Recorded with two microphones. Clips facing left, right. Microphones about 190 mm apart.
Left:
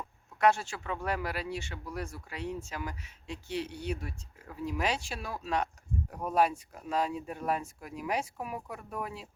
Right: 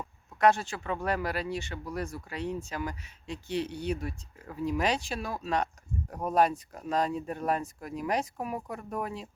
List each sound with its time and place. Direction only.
0.3 s speech: 10° left (ahead or behind)